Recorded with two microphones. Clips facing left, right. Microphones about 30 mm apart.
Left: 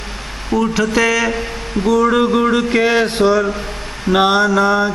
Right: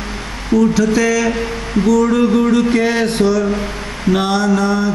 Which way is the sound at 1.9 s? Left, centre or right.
Left.